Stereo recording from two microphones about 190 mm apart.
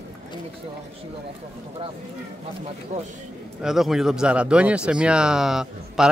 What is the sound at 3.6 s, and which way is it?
Speech, centre (ahead or behind).